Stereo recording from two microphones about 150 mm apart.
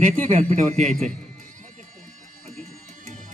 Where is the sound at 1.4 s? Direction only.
60° right (ahead or behind).